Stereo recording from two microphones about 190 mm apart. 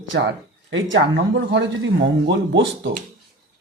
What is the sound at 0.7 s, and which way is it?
Speech, 80° right.